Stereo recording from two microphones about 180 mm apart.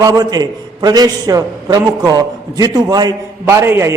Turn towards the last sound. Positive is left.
turn(degrees=-15)  # may be behind; listen again after turning